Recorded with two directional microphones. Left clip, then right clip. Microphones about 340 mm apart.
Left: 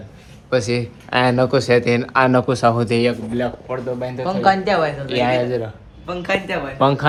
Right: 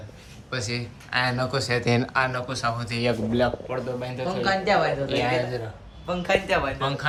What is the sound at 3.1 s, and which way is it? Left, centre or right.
Speech, centre.